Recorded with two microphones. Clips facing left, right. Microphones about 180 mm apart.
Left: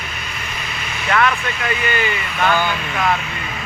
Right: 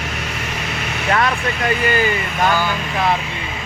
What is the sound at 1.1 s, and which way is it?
Speech, 35° right (ahead or behind).